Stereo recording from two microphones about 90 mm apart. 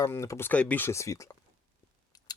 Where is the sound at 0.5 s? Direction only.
15° left (ahead or behind); by 1.3 s 35° left (ahead or behind).